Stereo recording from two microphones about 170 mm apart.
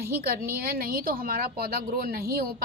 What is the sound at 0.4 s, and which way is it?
A woman's voice, 65° right (ahead or behind).